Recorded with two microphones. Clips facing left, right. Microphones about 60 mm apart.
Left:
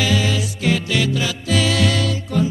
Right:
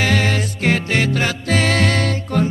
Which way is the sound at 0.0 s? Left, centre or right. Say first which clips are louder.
Right 2 dB; right.